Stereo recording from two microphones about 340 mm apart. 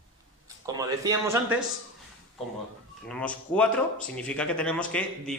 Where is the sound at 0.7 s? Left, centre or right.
Centre.